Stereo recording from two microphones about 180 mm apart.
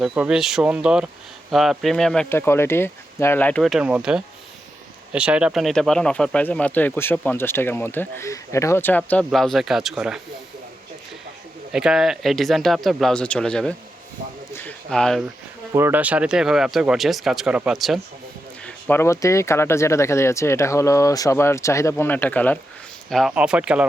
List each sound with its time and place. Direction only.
0.0 s speech: 5° right (ahead or behind)
11.7 s speech: 5° right (ahead or behind)
14.8 s speech: 5° left (ahead or behind)
15.7 s speech: 10° right (ahead or behind)
18.6 s speech: 10° left (ahead or behind); by 23.9 s 5° right (ahead or behind)